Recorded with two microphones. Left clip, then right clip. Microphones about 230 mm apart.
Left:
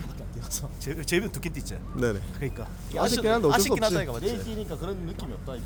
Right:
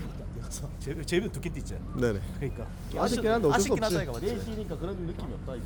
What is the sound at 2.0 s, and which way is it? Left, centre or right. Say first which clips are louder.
Speech: left 1 dB; centre.